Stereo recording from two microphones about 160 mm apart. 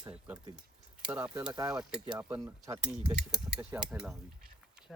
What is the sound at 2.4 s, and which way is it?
Speech, 20° right (ahead or behind).